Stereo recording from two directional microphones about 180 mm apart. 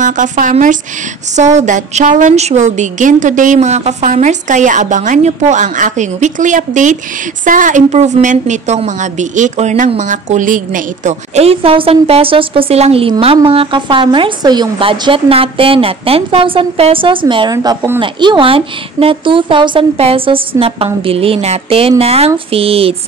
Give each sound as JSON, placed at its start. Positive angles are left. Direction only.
{"t": 0.0, "sound": "a woman's voice", "side_deg": -45}